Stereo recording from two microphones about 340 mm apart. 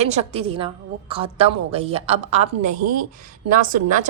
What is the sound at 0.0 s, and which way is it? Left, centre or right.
A woman's voice, centre.